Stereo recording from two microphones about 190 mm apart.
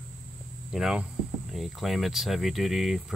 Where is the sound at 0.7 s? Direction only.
5° right (ahead or behind).